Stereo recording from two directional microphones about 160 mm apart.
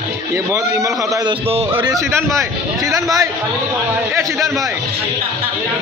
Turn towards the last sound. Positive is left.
turn(degrees=0)  # may be behind; listen again after turning